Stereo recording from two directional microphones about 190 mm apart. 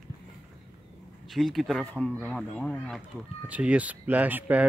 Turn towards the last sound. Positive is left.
turn(degrees=-10)  # may be behind; listen again after turning